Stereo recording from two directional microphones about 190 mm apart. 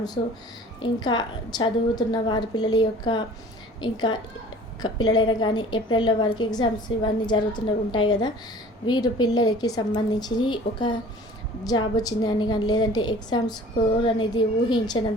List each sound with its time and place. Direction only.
0.8 s a woman's voice: 20° left (ahead or behind)